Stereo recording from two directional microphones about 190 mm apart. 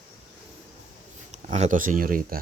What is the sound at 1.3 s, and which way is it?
Speech, 35° right (ahead or behind).